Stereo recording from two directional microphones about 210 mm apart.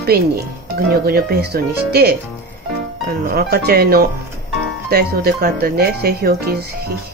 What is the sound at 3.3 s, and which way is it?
Speech, 45° right (ahead or behind).